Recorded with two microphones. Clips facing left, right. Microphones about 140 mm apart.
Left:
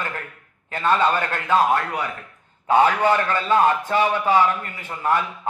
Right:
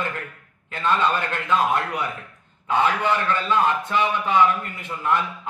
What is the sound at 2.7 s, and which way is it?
A man's voice, 40° left (ahead or behind).